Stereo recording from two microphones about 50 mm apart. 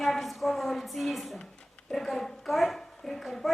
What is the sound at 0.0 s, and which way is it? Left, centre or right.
A woman's voice, centre.